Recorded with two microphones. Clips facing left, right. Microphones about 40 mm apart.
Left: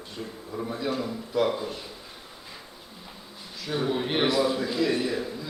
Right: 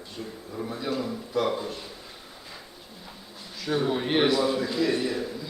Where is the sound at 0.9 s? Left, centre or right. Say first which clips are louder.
Even; centre.